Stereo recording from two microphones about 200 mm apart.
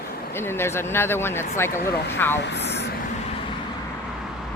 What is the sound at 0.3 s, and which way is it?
Speech, 10° left (ahead or behind).